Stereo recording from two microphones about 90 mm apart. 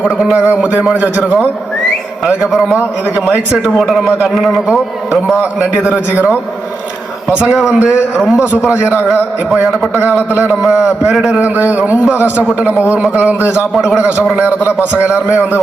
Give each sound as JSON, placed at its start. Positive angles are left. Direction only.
{"t": 0.0, "sound": "a man's voice", "side_deg": -10}
{"t": 2.2, "sound": "a man's voice", "side_deg": 0}
{"t": 5.4, "sound": "a man's voice", "side_deg": -15}
{"t": 7.3, "sound": "a man's voice", "side_deg": -10}
{"t": 9.5, "sound": "a man's voice", "side_deg": 0}
{"t": 10.1, "sound": "a man's voice", "side_deg": -20}
{"t": 10.6, "sound": "a man's voice", "side_deg": -5}
{"t": 11.3, "sound": "a man's voice", "side_deg": -15}
{"t": 13.7, "sound": "a man's voice", "side_deg": -5}
{"t": 14.8, "sound": "a man's voice", "side_deg": -20}